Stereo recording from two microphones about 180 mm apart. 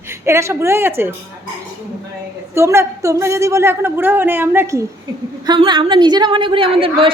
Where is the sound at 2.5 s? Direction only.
15° right (ahead or behind).